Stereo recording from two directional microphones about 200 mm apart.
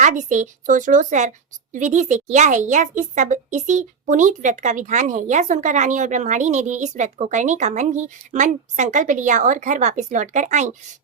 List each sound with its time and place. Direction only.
0.0 s a woman's voice: 40° right (ahead or behind)